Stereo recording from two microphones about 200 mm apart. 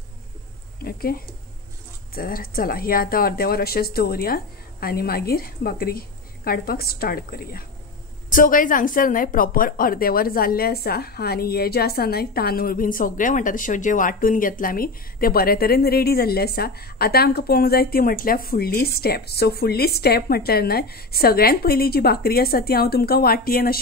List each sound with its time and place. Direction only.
2.1 s a woman's voice: 45° left (ahead or behind)